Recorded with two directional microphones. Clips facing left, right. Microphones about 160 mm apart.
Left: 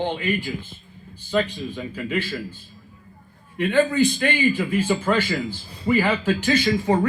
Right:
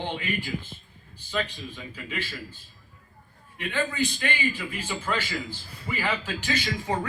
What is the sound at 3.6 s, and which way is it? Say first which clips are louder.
Speech: left 10 dB; 55° left (ahead or behind).